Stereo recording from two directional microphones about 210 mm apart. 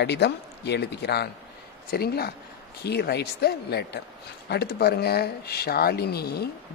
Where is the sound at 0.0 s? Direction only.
55° left (ahead or behind).